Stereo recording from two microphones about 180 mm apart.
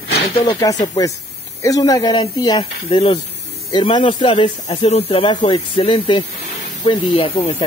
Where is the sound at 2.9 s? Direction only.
30° left (ahead or behind).